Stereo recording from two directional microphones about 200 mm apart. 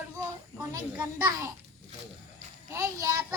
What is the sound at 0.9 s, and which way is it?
Speech, 15° right (ahead or behind).